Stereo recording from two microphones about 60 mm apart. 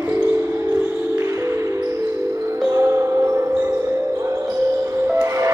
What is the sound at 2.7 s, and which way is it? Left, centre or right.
Music, right.